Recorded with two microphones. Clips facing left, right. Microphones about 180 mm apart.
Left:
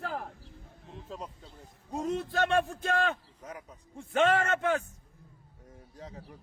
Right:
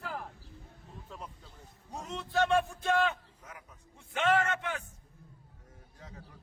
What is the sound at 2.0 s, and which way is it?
Speech, 50° left (ahead or behind).